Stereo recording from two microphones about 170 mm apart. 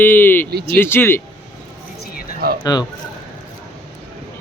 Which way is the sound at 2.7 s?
25° left (ahead or behind).